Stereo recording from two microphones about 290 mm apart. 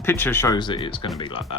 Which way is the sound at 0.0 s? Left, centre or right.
Centre.